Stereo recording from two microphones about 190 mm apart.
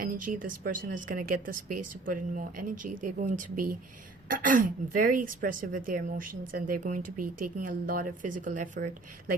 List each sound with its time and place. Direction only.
0.0 s a woman's voice: 50° right (ahead or behind)